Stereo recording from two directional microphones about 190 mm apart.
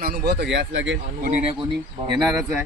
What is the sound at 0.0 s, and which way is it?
Speech, 55° right (ahead or behind).